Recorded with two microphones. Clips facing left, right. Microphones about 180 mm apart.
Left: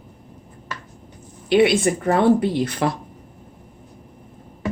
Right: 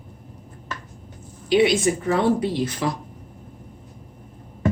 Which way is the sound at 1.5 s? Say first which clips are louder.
Left 2 dB; 55° left (ahead or behind).